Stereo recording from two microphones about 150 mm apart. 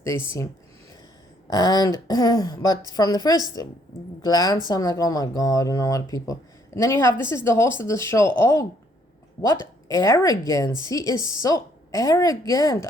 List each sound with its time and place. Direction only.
1.5 s speech: 25° left (ahead or behind)
9.9 s speech: 20° left (ahead or behind)